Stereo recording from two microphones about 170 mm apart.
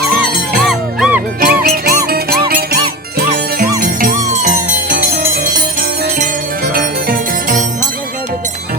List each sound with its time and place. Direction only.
0.6 s music: centre (ahead or behind)
1.4 s music: 60° right (ahead or behind)
6.7 s music: 60° right (ahead or behind)